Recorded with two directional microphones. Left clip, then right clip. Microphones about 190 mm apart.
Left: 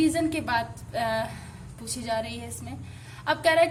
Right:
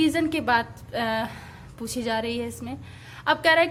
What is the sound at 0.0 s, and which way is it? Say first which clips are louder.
A woman's voice: right 2 dB; 30° right (ahead or behind).